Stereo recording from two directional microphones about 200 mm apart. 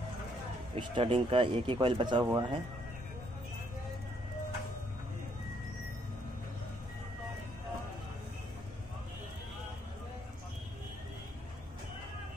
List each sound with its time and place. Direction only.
0.7 s speech: 25° right (ahead or behind)